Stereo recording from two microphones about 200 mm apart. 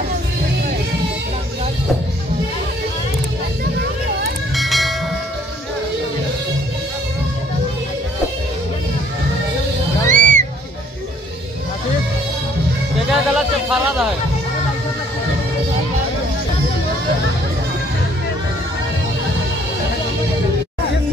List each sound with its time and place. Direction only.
4.6 s train: centre (ahead or behind)
10.0 s music: 40° right (ahead or behind)
12.9 s a sound: centre (ahead or behind)